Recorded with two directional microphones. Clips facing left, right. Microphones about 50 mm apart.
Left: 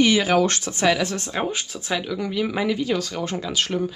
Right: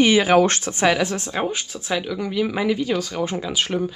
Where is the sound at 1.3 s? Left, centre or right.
Centre.